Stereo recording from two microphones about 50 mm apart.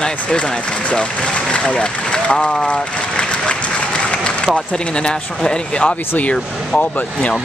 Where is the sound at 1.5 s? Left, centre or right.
Left.